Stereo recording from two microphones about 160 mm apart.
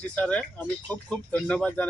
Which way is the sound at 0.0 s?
5° left (ahead or behind).